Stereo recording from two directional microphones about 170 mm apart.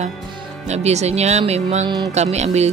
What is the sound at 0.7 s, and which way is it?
Speech, 40° right (ahead or behind).